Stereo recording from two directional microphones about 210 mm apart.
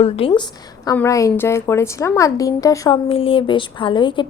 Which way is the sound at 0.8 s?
15° left (ahead or behind).